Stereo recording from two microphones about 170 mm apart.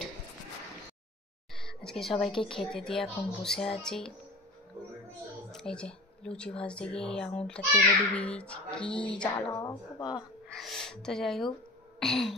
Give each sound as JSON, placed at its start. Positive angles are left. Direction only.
{"t": 1.5, "sound": "a woman's voice", "side_deg": 5}
{"t": 5.5, "sound": "a woman's voice", "side_deg": 5}
{"t": 9.6, "sound": "speech", "side_deg": 25}
{"t": 10.5, "sound": "gasp", "side_deg": 0}
{"t": 12.0, "sound": "a woman's voice", "side_deg": 0}